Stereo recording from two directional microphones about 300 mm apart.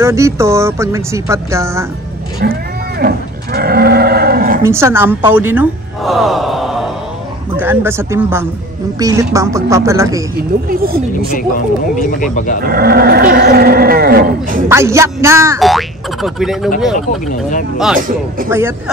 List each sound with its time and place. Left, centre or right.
0.0 s speech: centre
2.4 s speech: right
3.0 s cattle: right
4.6 s speech: centre
10.3 s speech: right
11.3 s speech: left
12.7 s speech: right
14.7 s speech: centre
17.3 s speech: left
17.9 s speech: right